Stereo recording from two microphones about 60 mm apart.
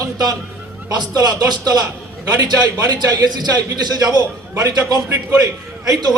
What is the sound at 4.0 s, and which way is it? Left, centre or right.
Speech, right.